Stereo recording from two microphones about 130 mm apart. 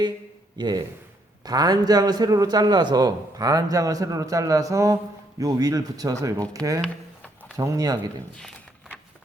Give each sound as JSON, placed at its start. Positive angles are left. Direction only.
{"t": 0.5, "sound": "a man's voice", "side_deg": -35}
{"t": 6.8, "sound": "a sound", "side_deg": 5}
{"t": 7.5, "sound": "a man's voice", "side_deg": -25}